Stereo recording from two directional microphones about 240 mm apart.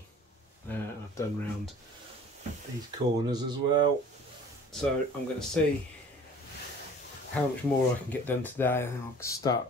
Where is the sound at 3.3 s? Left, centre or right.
Centre.